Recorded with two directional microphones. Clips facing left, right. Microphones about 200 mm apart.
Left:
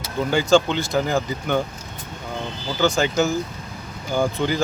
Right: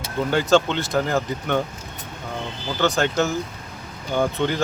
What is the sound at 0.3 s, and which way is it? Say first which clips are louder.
Speech: left 1 dB; centre (ahead or behind).